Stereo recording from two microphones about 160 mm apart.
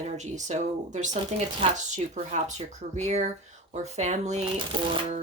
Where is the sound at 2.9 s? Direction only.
45° right (ahead or behind).